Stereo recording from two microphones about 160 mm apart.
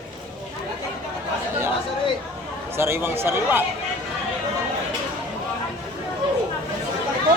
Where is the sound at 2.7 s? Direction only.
15° right (ahead or behind).